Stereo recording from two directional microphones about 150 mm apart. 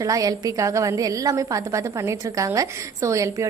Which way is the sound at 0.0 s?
25° right (ahead or behind).